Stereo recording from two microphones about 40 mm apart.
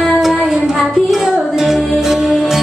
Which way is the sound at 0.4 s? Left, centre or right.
Centre.